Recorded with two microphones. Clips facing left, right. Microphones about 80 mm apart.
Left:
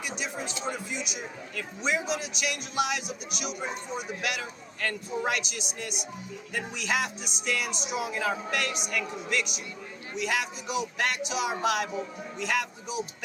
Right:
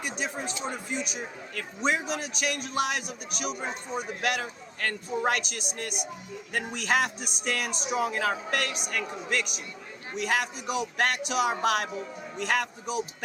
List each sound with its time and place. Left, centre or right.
0.2 s a man's voice: right